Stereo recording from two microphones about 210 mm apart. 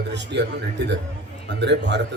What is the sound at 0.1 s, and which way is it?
Speech, 55° right (ahead or behind).